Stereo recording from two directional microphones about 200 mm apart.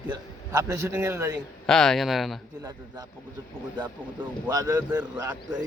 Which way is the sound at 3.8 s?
10° right (ahead or behind).